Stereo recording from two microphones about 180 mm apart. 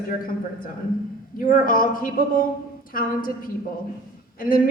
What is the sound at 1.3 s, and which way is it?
A woman's voice, 50° left (ahead or behind).